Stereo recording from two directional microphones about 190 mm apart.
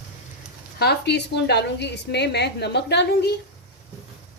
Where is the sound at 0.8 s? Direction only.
60° left (ahead or behind).